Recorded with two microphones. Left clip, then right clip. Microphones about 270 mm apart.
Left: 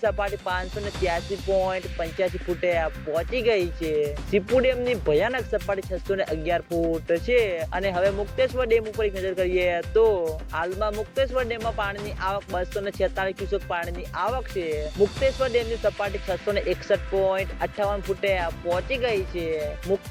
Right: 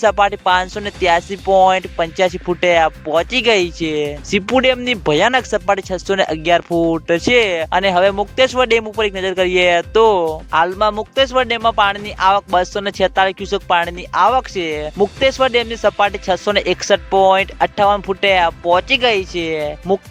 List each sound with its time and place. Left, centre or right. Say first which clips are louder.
0.0 s speech: right 12 dB; right